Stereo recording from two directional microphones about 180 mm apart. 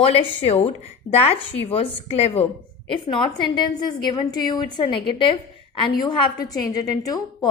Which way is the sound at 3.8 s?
25° left (ahead or behind).